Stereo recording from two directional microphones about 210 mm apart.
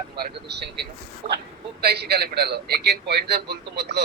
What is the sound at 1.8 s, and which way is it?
Speech, 50° right (ahead or behind).